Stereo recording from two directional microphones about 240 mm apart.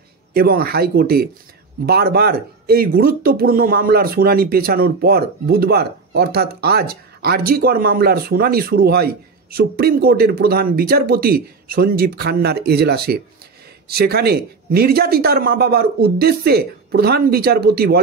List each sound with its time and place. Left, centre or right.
0.3 s speech: right